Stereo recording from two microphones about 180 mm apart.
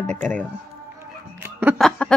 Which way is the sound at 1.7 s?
5° left (ahead or behind).